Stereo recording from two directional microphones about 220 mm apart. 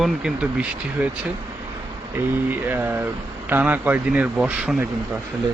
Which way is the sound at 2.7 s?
10° right (ahead or behind).